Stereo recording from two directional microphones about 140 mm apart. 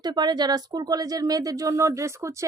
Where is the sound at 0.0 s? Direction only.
30° right (ahead or behind).